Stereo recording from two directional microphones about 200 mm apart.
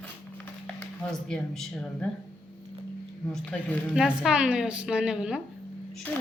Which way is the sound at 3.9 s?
5° right (ahead or behind).